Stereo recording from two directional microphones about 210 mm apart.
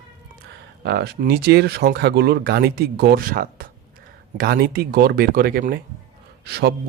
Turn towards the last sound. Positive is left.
turn(degrees=-50)  # may be behind; listen again after turning